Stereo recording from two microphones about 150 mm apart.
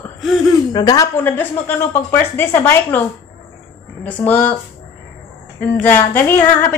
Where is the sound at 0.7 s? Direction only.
25° left (ahead or behind).